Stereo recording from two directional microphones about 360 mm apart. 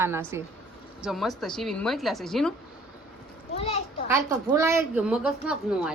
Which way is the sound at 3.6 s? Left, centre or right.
Centre.